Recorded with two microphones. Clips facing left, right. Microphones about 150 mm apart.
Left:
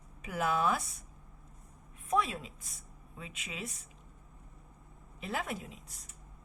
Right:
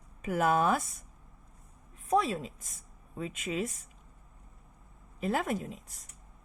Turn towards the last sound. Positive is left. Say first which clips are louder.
# right 6 dB
turn(degrees=-45)  # may be behind; listen again after turning